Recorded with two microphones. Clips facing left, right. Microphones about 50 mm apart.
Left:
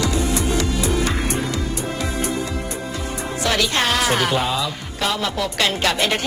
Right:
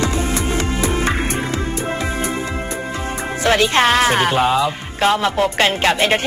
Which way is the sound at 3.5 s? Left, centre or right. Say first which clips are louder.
Right 6 dB; right.